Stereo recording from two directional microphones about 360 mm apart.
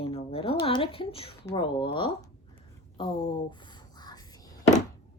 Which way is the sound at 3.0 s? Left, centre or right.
Centre.